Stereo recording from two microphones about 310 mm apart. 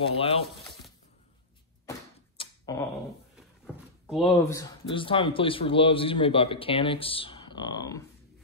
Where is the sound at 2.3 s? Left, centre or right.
Centre.